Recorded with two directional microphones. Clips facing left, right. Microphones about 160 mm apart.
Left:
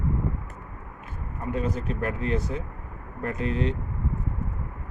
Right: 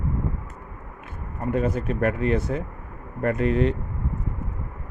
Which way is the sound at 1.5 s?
55° right (ahead or behind).